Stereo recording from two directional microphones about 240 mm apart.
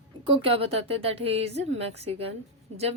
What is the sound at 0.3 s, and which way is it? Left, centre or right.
A woman's voice, right.